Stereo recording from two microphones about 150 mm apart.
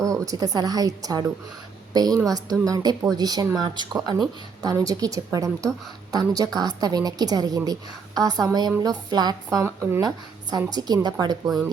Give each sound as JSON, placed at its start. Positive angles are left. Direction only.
{"t": 0.0, "sound": "a woman's voice", "side_deg": -20}